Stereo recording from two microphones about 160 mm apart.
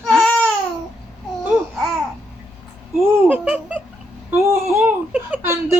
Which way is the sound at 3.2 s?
10° right (ahead or behind).